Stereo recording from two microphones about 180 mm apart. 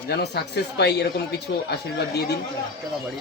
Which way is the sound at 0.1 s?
65° left (ahead or behind).